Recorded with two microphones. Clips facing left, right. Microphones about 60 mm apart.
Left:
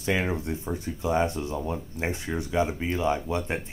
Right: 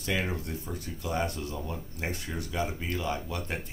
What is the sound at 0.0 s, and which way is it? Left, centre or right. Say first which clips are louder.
Speech: left 5 dB; left.